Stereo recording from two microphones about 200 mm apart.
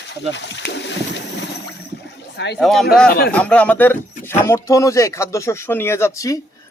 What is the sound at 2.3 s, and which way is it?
Speech, 60° left (ahead or behind).